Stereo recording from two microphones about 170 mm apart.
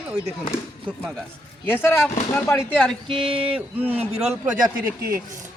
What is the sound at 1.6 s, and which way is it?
Speech, 15° left (ahead or behind).